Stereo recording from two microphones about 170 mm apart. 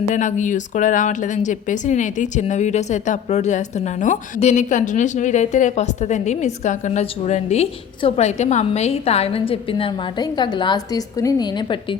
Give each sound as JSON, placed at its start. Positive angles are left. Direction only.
{"t": 0.1, "sound": "speech", "side_deg": 45}